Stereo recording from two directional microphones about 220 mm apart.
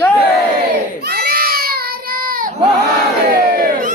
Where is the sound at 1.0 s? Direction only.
45° right (ahead or behind).